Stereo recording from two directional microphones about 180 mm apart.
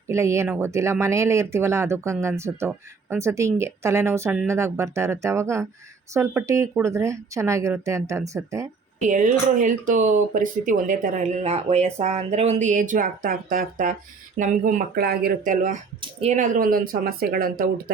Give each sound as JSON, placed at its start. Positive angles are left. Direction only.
{"t": 0.1, "sound": "speech", "side_deg": -15}
{"t": 9.0, "sound": "speech", "side_deg": -45}